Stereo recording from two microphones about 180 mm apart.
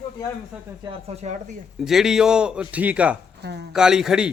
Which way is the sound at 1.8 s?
Centre (ahead or behind).